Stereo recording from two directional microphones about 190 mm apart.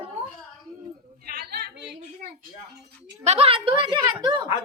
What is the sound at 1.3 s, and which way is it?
Chatter, 60° right (ahead or behind).